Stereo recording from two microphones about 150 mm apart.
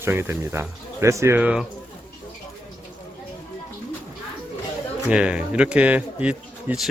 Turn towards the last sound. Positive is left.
turn(degrees=-10)  # may be behind; listen again after turning